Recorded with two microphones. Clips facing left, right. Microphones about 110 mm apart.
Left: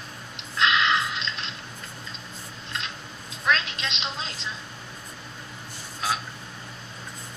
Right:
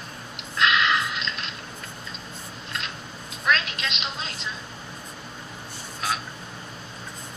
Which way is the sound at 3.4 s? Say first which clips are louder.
Right 1 dB; 20° left (ahead or behind).